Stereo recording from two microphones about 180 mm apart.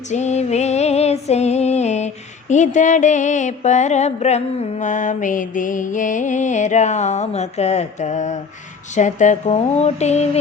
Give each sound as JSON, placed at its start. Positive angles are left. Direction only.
{"t": 0.1, "sound": "music", "side_deg": 40}